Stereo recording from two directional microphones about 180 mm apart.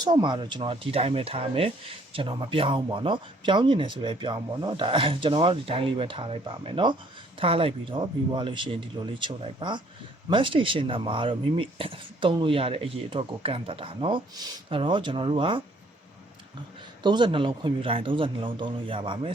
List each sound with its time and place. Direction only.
0.0 s speech: 25° right (ahead or behind)
17.0 s speech: 25° right (ahead or behind)